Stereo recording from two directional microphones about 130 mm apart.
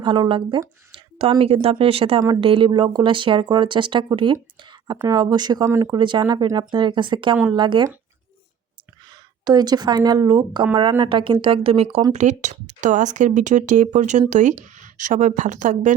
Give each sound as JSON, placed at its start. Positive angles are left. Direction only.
{"t": 0.0, "sound": "speech", "side_deg": -35}
{"t": 9.4, "sound": "speech", "side_deg": -30}
{"t": 12.1, "sound": "a woman's voice", "side_deg": -65}